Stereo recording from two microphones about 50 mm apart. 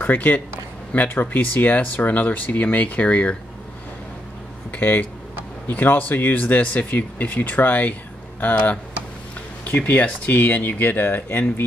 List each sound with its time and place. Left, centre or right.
0.0 s speech: left
4.6 s speech: left
9.8 s speech: left